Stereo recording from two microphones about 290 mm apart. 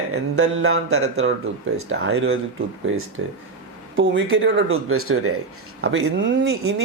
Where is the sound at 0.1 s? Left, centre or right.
Right.